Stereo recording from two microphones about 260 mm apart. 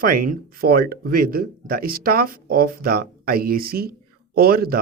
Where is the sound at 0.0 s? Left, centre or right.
Right.